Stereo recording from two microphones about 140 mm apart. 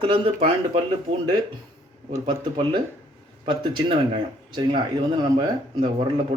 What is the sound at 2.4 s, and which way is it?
Speech, 40° right (ahead or behind).